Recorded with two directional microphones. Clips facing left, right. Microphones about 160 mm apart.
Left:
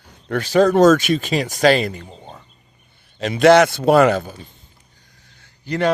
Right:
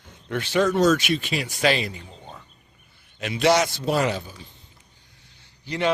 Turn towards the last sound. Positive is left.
turn(degrees=45)  # may be behind; listen again after turning